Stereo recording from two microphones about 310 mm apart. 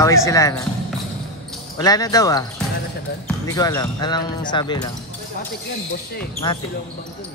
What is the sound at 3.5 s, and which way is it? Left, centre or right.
Speech, centre.